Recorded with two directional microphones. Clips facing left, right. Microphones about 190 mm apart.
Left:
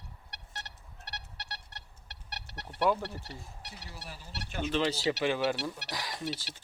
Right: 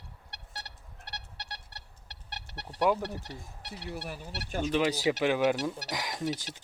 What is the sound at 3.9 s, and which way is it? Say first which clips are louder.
Speech: right 7 dB; 60° right (ahead or behind).